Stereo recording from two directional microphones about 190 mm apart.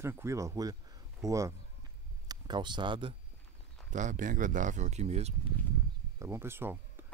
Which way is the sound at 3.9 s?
40° right (ahead or behind).